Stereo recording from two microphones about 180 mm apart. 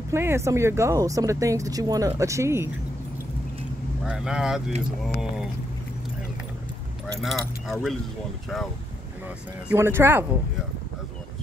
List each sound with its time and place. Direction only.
0.1 s speech: 15° right (ahead or behind)
4.0 s speech: 5° right (ahead or behind)
7.2 s speech: centre (ahead or behind)
9.7 s speech: 10° right (ahead or behind)